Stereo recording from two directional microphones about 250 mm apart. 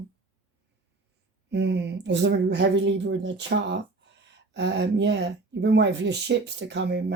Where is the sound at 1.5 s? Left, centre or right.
Right.